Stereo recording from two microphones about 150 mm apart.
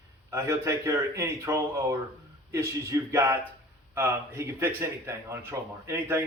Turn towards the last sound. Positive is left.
turn(degrees=-15)  # may be behind; listen again after turning